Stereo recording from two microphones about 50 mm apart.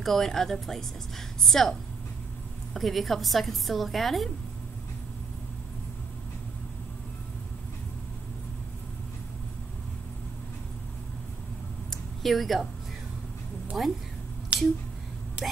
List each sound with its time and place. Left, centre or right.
0.0 s a woman's voice: centre
11.9 s a sound: centre
13.8 s a woman's voice: centre
15.4 s speech: right